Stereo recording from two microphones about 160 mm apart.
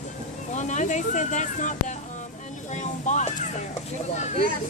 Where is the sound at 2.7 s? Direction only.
50° left (ahead or behind).